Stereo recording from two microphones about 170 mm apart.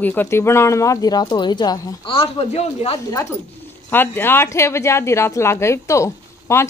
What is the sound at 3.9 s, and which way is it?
Speech, 10° left (ahead or behind).